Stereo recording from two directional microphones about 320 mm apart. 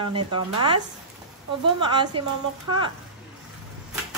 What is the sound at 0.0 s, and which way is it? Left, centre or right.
Speech, centre.